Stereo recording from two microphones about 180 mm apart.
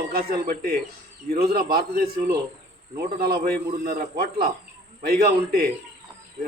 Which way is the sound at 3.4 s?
55° right (ahead or behind).